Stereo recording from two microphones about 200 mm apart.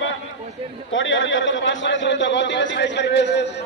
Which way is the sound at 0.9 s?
70° left (ahead or behind).